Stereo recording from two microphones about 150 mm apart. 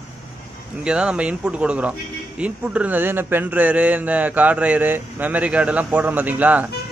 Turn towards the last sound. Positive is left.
turn(degrees=-10)  # may be behind; listen again after turning